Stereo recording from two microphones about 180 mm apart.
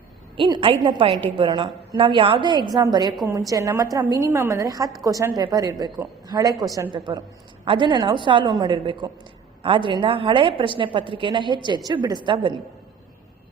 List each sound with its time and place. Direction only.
0.3 s a woman's voice: 25° right (ahead or behind)